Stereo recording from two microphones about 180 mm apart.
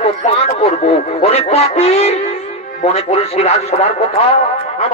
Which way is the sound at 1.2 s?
35° left (ahead or behind).